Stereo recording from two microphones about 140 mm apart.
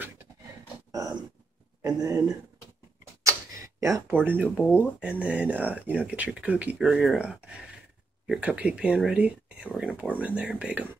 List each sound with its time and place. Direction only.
1.8 s speech: 25° right (ahead or behind)
3.3 s a sound: 20° right (ahead or behind)
4.6 s speech: 10° right (ahead or behind)